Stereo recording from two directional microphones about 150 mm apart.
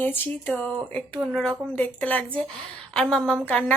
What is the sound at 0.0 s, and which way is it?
A woman's voice, 10° left (ahead or behind).